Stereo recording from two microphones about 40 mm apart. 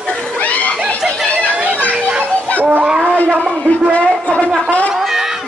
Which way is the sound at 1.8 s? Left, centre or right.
Right.